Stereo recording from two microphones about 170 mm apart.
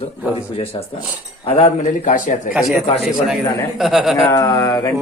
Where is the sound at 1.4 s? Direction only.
35° left (ahead or behind).